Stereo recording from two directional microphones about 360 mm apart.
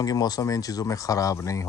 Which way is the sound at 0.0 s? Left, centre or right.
Centre.